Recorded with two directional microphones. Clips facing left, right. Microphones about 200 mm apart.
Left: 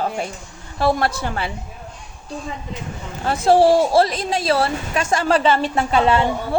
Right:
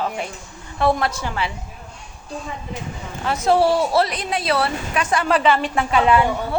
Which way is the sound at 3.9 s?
45° left (ahead or behind).